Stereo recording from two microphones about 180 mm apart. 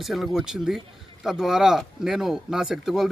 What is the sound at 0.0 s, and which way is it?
Speech, centre (ahead or behind).